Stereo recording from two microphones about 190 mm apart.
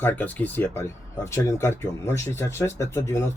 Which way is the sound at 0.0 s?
10° left (ahead or behind).